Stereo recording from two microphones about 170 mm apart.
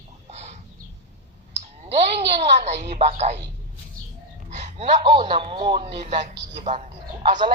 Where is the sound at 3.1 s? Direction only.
45° right (ahead or behind).